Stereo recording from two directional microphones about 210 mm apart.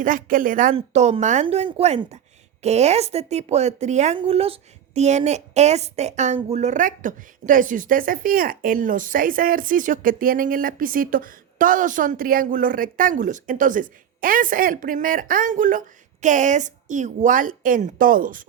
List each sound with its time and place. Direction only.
0.0 s a woman's voice: 40° right (ahead or behind)